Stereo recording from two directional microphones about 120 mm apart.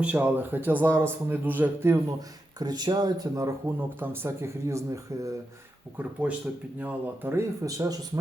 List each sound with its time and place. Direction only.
0.0 s a man's voice: 15° right (ahead or behind)
2.6 s speech: 35° right (ahead or behind)
4.0 s speech: 20° right (ahead or behind)
6.0 s a man's voice: 10° right (ahead or behind); by 8.2 s 30° right (ahead or behind)